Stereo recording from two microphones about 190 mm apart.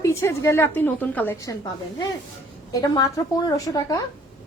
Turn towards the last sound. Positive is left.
turn(degrees=20)  # may be behind; listen again after turning